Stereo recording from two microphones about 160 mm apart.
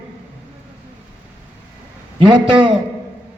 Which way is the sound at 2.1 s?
30° right (ahead or behind).